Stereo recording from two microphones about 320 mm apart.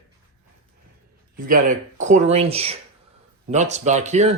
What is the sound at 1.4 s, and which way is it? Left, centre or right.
Speech, right.